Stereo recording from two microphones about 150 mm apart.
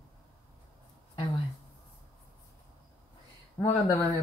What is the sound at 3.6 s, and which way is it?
Speech, 15° left (ahead or behind).